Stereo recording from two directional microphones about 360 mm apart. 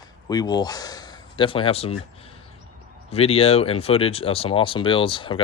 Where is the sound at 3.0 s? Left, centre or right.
Centre.